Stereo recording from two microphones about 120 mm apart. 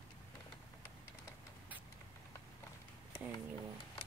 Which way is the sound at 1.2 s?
15° right (ahead or behind).